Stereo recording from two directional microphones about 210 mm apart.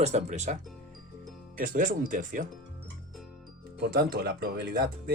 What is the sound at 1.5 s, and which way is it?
Speech, 40° right (ahead or behind).